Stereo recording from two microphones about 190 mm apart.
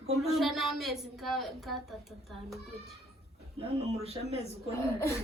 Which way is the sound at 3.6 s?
30° right (ahead or behind).